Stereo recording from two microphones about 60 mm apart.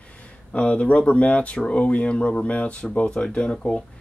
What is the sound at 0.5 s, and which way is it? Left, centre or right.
Speech, left.